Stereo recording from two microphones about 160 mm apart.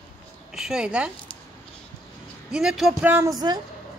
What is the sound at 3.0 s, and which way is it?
Speech, 15° right (ahead or behind).